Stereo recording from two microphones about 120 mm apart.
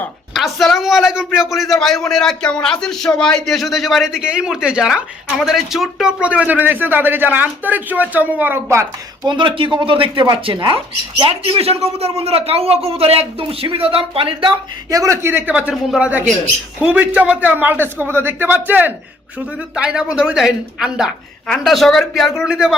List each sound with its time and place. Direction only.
0.3 s a man's voice: centre (ahead or behind); by 8.9 s 20° right (ahead or behind)
9.2 s a man's voice: 40° right (ahead or behind)
14.9 s a man's voice: 25° right (ahead or behind); by 22.7 s 5° right (ahead or behind)